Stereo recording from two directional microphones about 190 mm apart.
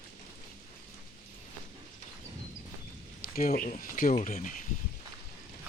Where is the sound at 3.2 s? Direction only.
50° left (ahead or behind).